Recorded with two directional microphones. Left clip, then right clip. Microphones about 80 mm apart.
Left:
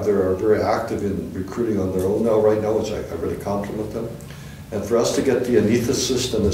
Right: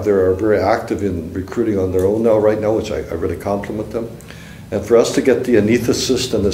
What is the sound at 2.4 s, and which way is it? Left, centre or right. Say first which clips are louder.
Speech: right 3 dB; right.